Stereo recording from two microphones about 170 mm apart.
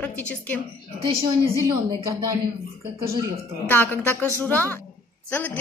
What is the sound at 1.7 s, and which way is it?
Speech, 25° right (ahead or behind).